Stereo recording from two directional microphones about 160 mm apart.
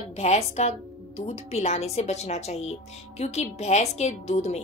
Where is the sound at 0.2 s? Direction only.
45° left (ahead or behind).